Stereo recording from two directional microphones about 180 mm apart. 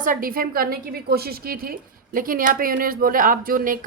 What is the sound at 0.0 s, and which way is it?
A woman's voice, 50° right (ahead or behind).